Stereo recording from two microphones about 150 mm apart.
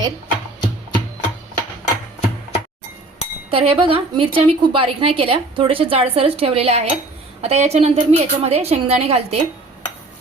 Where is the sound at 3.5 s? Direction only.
40° right (ahead or behind).